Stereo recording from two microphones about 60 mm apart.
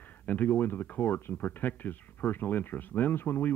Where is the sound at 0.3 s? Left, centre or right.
Left.